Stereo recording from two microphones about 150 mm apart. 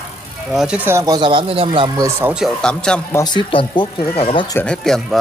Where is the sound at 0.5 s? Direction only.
10° right (ahead or behind); by 2.1 s 25° right (ahead or behind).